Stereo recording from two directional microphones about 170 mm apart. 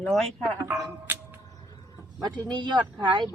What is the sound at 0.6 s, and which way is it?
Speech, 10° right (ahead or behind).